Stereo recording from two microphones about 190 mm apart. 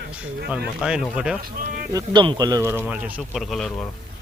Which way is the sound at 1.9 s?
20° right (ahead or behind).